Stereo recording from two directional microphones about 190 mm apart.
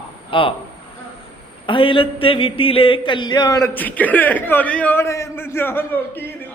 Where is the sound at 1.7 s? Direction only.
25° left (ahead or behind).